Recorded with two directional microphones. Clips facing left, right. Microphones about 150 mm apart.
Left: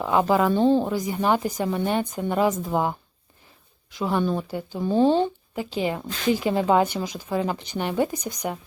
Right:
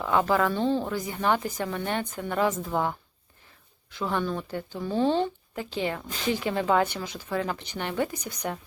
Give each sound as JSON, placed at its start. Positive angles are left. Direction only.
{"t": 0.0, "sound": "a woman's voice", "side_deg": 15}